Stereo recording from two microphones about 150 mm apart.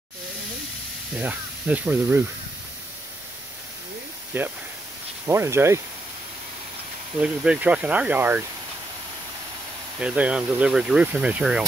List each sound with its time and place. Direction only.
1.1 s speech: 10° right (ahead or behind)
4.3 s speech: 15° right (ahead or behind)
7.2 s speech: 10° right (ahead or behind)
9.9 s speech: 10° right (ahead or behind)